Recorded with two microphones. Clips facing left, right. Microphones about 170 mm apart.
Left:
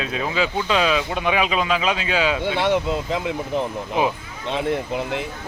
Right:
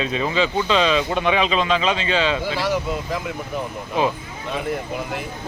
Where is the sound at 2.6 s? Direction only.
25° left (ahead or behind).